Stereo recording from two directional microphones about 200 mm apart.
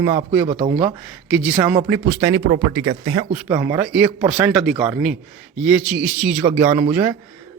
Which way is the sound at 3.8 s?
5° right (ahead or behind).